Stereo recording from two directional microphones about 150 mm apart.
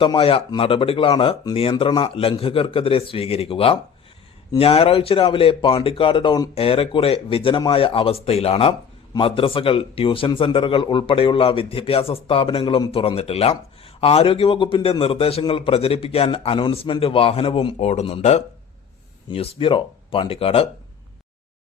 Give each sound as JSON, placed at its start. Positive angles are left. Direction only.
{"t": 0.2, "sound": "speech", "side_deg": 35}